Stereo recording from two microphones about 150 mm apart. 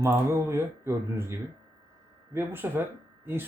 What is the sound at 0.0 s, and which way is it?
Speech, 20° right (ahead or behind).